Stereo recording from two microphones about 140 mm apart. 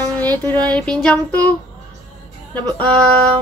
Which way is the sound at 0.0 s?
15° left (ahead or behind).